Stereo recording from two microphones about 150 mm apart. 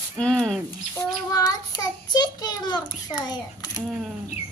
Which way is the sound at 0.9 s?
25° left (ahead or behind).